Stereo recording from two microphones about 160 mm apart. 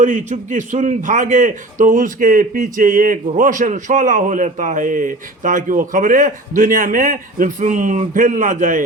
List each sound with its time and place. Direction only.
0.0 s a man's voice: 50° right (ahead or behind)